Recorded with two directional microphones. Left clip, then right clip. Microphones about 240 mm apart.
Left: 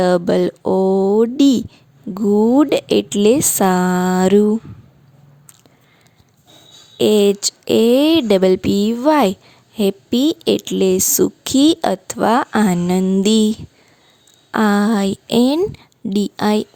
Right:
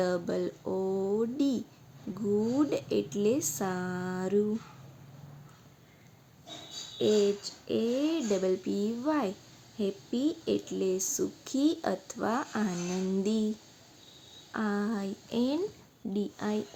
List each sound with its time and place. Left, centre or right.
0.0 s speech: left
7.0 s a woman's voice: left
14.5 s a woman's voice: left